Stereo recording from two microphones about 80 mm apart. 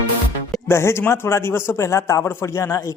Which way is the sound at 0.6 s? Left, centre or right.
Left.